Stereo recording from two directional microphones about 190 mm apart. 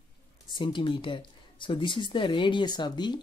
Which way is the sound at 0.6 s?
25° left (ahead or behind).